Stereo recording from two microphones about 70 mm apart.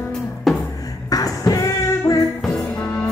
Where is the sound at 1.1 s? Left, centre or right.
Left.